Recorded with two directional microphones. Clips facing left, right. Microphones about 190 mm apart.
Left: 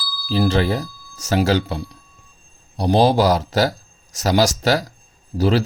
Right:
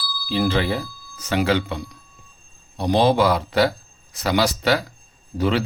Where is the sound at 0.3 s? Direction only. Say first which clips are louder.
Left 3 dB; 40° left (ahead or behind).